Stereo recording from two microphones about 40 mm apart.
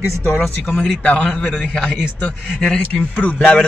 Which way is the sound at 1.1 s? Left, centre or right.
Left.